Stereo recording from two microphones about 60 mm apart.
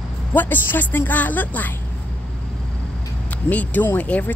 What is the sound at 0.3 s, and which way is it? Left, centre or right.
Speech, left.